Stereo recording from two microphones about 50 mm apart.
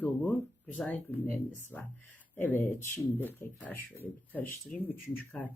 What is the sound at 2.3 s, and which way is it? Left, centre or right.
Speech, left.